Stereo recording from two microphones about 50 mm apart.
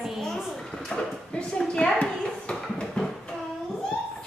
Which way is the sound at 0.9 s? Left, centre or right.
Centre.